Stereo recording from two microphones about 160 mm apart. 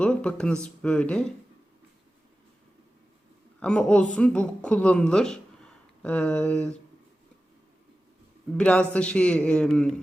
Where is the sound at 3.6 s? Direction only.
5° left (ahead or behind).